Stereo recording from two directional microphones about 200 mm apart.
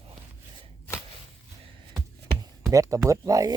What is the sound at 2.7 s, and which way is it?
Speech, 15° right (ahead or behind).